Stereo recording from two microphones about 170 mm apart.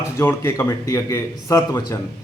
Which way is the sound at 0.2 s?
15° left (ahead or behind).